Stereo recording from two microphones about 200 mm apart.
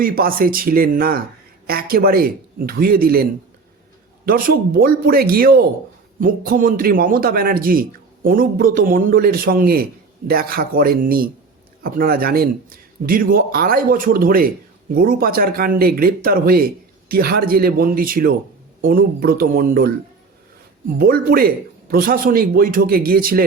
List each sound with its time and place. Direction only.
0.0 s a man's voice: 45° right (ahead or behind)
4.3 s a man's voice: 45° right (ahead or behind)
21.0 s a man's voice: 45° right (ahead or behind)